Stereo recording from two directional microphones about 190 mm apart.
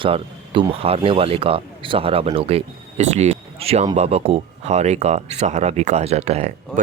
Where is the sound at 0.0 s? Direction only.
30° right (ahead or behind).